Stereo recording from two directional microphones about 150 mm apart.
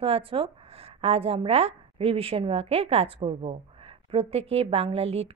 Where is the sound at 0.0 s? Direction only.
40° right (ahead or behind).